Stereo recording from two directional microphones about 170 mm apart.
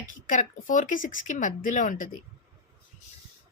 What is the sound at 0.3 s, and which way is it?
A woman's voice, 50° left (ahead or behind).